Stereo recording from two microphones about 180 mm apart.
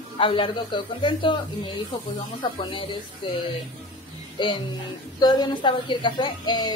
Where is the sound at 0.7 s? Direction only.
25° left (ahead or behind).